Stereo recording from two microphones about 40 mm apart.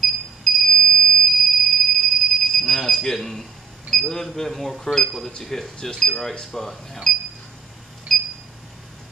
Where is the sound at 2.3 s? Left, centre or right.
Centre.